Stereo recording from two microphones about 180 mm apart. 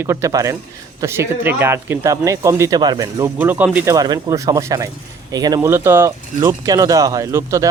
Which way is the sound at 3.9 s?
20° right (ahead or behind).